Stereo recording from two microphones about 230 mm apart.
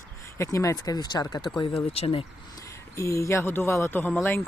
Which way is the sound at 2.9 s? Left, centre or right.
Centre.